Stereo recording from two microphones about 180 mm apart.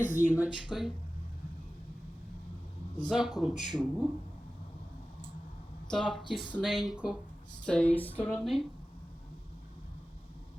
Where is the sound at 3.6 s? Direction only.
25° right (ahead or behind).